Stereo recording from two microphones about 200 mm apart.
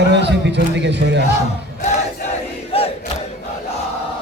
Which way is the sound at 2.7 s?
30° left (ahead or behind).